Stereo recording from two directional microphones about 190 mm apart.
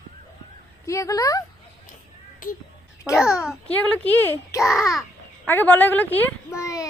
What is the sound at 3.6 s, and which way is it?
A child's voice, 5° left (ahead or behind).